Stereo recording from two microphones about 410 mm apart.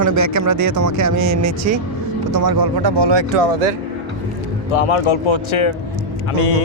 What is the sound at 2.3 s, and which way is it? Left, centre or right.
Speech, right.